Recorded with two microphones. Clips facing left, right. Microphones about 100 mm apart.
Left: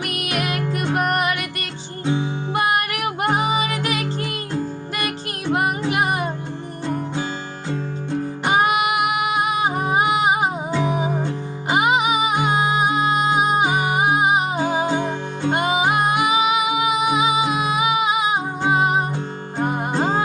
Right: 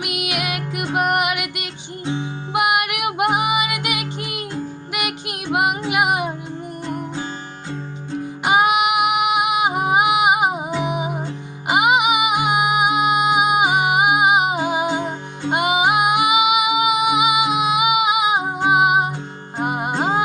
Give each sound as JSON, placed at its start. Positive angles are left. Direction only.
{"t": 0.0, "sound": "music", "side_deg": -15}
{"t": 8.4, "sound": "music", "side_deg": -15}